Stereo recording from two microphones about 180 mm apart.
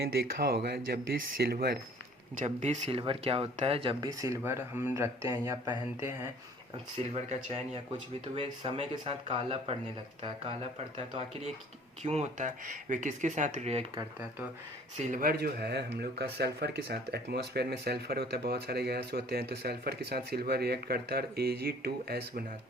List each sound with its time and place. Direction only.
0.3 s speech: 65° right (ahead or behind)
2.4 s speech: 40° right (ahead or behind); by 6.3 s 15° right (ahead or behind)
8.4 s speech: 30° right (ahead or behind)
12.0 s speech: 35° right (ahead or behind)
14.0 s speech: 15° right (ahead or behind)
14.9 s speech: 45° right (ahead or behind); by 22.4 s 60° right (ahead or behind)